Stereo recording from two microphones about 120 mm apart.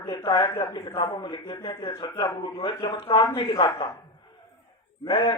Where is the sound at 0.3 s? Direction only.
35° left (ahead or behind).